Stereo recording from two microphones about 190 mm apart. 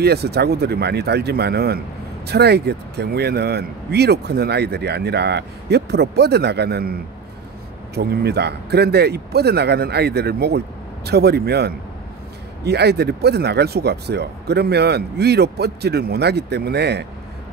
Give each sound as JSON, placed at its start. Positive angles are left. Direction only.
{"t": 0.0, "sound": "speech", "side_deg": -60}